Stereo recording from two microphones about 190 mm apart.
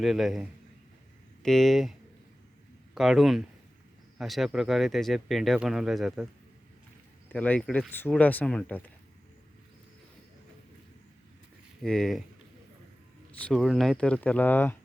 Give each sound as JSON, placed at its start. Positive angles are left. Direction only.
{"t": 0.0, "sound": "speech", "side_deg": 0}
{"t": 7.3, "sound": "speech", "side_deg": 10}
{"t": 11.8, "sound": "speech", "side_deg": 0}
{"t": 13.4, "sound": "speech", "side_deg": 0}